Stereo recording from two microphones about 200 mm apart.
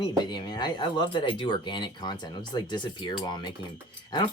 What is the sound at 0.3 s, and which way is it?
Speech, 20° left (ahead or behind).